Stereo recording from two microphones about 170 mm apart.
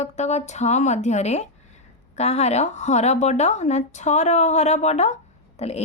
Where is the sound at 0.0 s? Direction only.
40° left (ahead or behind).